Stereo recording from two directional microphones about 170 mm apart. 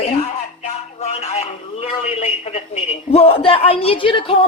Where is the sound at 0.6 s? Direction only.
40° left (ahead or behind).